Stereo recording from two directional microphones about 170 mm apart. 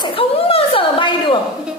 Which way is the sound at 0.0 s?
35° left (ahead or behind).